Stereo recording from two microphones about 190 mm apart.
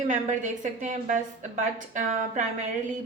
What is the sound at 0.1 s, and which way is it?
A woman's voice, 40° right (ahead or behind).